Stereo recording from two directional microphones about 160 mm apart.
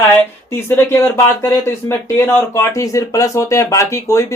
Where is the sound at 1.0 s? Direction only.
15° left (ahead or behind).